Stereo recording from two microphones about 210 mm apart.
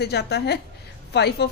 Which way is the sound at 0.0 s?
50° left (ahead or behind).